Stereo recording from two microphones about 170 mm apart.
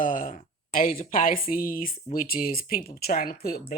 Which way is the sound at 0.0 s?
50° left (ahead or behind).